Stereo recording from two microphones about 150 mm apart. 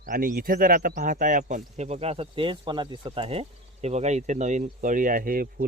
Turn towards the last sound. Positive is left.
turn(degrees=-70)  # may be behind; listen again after turning